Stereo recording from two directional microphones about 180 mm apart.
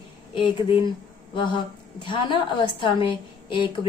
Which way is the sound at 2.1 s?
25° left (ahead or behind).